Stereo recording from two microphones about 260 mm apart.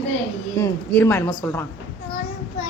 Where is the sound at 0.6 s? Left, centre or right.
Centre.